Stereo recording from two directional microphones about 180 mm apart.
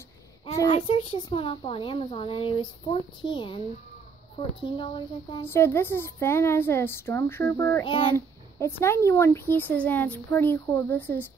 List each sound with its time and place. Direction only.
0.6 s a woman's voice: 25° left (ahead or behind)
4.6 s a woman's voice: 25° left (ahead or behind)
5.5 s a child's voice: 15° left (ahead or behind)
7.8 s a woman's voice: 25° left (ahead or behind)
8.5 s a child's voice: 15° left (ahead or behind)